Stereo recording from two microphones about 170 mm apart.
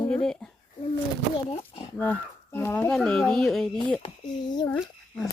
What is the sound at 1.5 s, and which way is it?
Speech, 35° left (ahead or behind).